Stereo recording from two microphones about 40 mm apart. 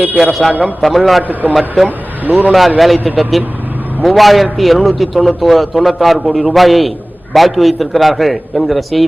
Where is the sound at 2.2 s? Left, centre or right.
Right.